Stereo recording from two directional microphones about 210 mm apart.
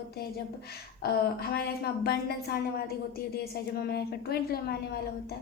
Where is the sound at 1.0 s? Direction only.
50° left (ahead or behind).